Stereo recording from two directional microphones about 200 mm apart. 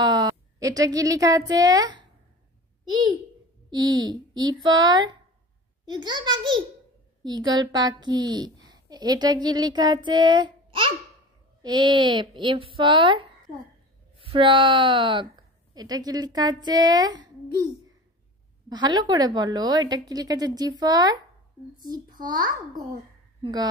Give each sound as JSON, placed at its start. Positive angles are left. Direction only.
{"t": 0.0, "sound": "a woman's voice", "side_deg": -20}
{"t": 18.7, "sound": "a woman's voice", "side_deg": -20}
{"t": 22.2, "sound": "a woman's voice", "side_deg": -20}